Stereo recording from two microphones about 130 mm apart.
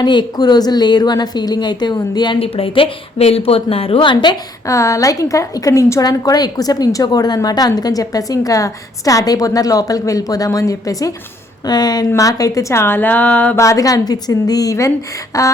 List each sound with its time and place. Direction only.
0.0 s a woman's voice: 35° left (ahead or behind)
4.6 s a woman's voice: 25° left (ahead or behind)
13.6 s a woman's voice: 25° left (ahead or behind)